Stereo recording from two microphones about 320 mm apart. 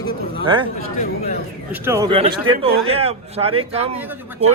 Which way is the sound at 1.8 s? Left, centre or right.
Centre.